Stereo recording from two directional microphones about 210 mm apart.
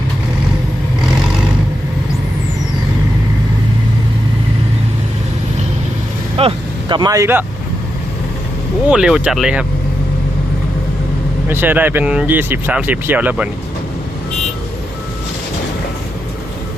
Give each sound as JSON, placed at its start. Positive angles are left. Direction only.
{"t": 6.3, "sound": "vehicle", "side_deg": -25}
{"t": 8.9, "sound": "speech", "side_deg": -5}
{"t": 11.4, "sound": "speech", "side_deg": -10}